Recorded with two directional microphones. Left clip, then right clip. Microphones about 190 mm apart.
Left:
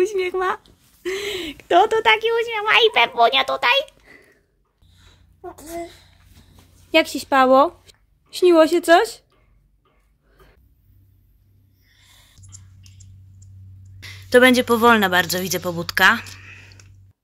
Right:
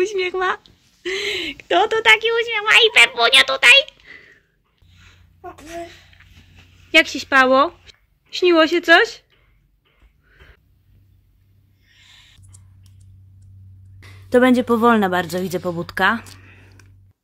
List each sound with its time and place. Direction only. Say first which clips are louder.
0.0 s a woman's voice: right 1 dB; 10° left (ahead or behind)
5.4 s a child's voice: even; 10° left (ahead or behind)
6.9 s speech: right 3 dB; 15° left (ahead or behind)
12.4 s music: left 7 dB; 35° right (ahead or behind)
14.0 s speech: left 2 dB; 20° right (ahead or behind)
16.3 s a sound: left 5 dB; 15° right (ahead or behind)